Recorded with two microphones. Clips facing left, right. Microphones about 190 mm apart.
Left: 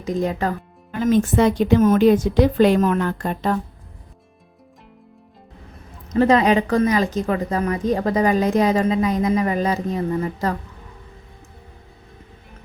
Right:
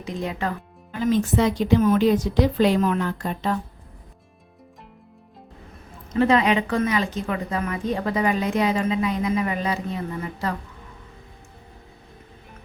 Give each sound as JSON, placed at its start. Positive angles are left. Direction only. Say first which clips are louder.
{"t": 0.0, "sound": "speech", "louder": "left 6 dB", "side_deg": 45}
{"t": 6.1, "sound": "a woman's voice", "louder": "left 3 dB", "side_deg": 40}